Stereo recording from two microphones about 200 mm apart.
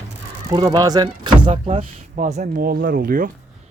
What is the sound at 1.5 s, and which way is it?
Speech, 35° right (ahead or behind).